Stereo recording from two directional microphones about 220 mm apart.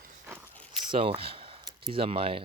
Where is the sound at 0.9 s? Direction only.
25° right (ahead or behind).